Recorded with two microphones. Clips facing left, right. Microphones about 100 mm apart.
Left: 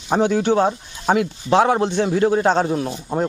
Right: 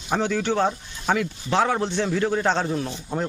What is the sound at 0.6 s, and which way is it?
Speech, 20° left (ahead or behind).